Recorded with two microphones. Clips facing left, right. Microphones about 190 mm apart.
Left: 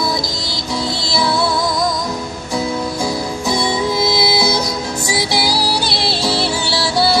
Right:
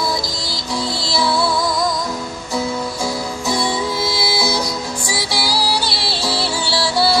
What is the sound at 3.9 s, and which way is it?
Music, 20° left (ahead or behind).